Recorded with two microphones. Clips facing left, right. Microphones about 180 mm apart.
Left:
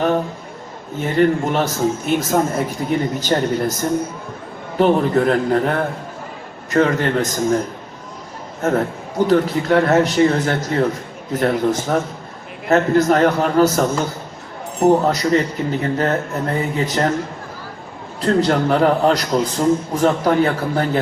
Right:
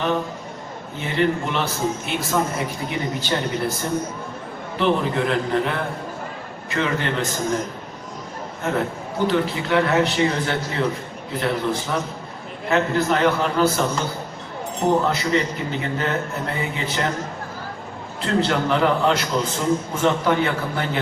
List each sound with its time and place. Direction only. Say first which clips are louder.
0.9 s a man's voice: left 6 dB; 45° left (ahead or behind)
8.6 s a man's voice: left 5 dB; 40° left (ahead or behind)
18.2 s a man's voice: left 5 dB; 40° left (ahead or behind)